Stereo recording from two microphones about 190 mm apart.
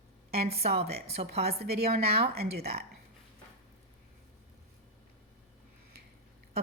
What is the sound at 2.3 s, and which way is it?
Speech, 55° right (ahead or behind).